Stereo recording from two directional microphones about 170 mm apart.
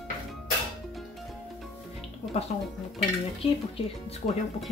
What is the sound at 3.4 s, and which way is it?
Speech, 30° left (ahead or behind).